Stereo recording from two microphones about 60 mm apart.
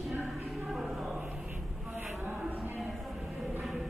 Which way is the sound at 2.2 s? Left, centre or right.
Right.